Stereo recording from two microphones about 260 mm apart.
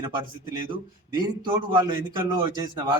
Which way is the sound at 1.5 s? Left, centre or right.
Centre.